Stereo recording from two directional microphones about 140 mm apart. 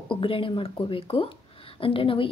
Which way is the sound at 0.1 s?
40° left (ahead or behind).